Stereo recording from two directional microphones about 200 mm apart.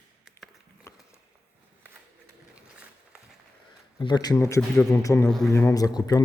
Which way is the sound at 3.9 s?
20° left (ahead or behind).